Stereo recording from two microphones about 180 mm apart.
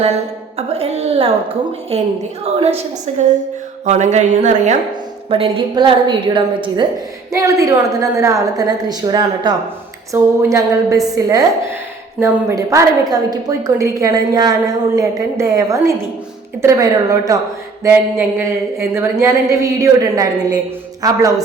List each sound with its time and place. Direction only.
0.5 s a woman's voice: 35° right (ahead or behind)
5.3 s a woman's voice: 30° right (ahead or behind)